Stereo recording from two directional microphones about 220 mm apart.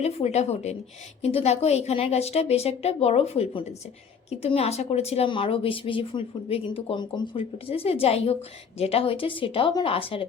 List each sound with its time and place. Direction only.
0.0 s speech: 30° left (ahead or behind)